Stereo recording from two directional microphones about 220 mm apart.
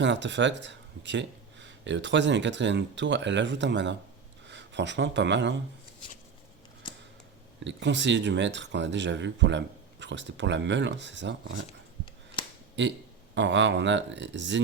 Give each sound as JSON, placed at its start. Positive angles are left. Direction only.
{"t": 0.0, "sound": "speech", "side_deg": -55}
{"t": 7.6, "sound": "speech", "side_deg": -55}
{"t": 12.8, "sound": "speech", "side_deg": -55}